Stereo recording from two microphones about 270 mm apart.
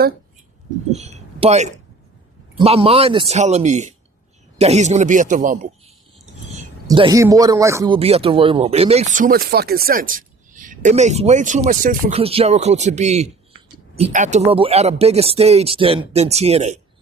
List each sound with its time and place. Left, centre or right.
0.9 s speech: right
6.8 s speech: centre